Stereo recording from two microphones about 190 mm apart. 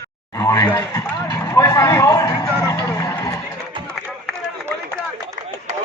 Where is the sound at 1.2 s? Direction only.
15° left (ahead or behind).